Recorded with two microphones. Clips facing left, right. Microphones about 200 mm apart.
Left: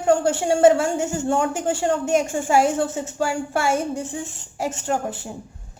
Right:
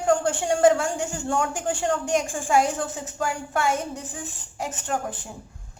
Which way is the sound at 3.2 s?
10° left (ahead or behind).